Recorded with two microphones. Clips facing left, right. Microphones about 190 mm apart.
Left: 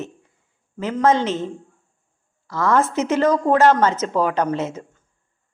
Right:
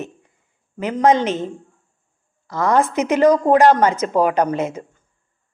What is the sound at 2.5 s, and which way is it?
Speech, 15° right (ahead or behind).